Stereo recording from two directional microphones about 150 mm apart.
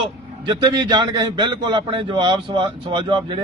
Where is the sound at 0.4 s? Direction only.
30° right (ahead or behind).